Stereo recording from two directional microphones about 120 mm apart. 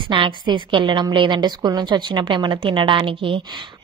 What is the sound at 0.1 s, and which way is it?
A woman's voice, 40° right (ahead or behind).